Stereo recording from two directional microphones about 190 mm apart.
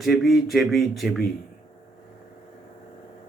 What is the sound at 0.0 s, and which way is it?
A man's voice, centre (ahead or behind).